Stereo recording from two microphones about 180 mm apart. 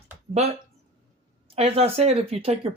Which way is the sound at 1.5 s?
35° right (ahead or behind).